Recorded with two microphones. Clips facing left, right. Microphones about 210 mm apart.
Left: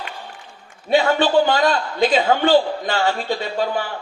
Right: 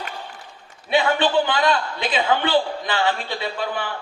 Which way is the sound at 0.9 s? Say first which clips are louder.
Left 3 dB; 45° left (ahead or behind).